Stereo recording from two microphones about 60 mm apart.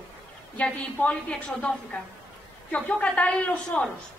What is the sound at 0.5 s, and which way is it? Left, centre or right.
A woman's voice, left.